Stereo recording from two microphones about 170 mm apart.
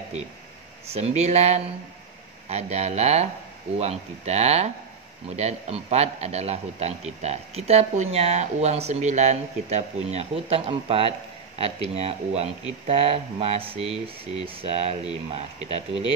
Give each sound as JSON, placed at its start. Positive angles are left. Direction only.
{"t": 0.9, "sound": "a man's voice", "side_deg": -40}